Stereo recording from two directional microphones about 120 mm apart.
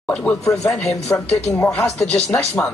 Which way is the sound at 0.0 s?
10° left (ahead or behind).